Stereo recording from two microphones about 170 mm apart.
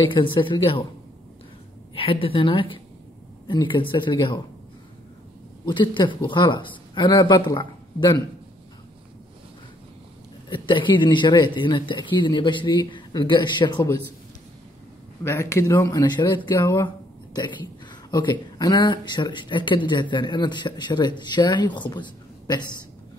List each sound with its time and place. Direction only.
0.0 s speech: 30° left (ahead or behind)
2.0 s a woman's voice: 35° left (ahead or behind)
5.7 s speech: 30° left (ahead or behind)
10.5 s speech: 30° left (ahead or behind)
15.2 s speech: 15° left (ahead or behind)
16.8 s a sound: 25° left (ahead or behind)
18.1 s speech: 25° left (ahead or behind)